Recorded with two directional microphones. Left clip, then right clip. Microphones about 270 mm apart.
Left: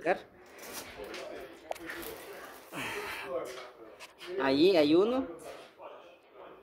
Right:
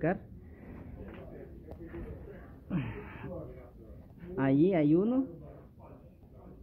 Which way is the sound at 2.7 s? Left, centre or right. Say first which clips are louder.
Left 6 dB; centre.